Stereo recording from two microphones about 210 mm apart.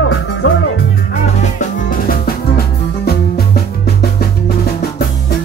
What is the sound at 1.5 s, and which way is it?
Music, 40° left (ahead or behind).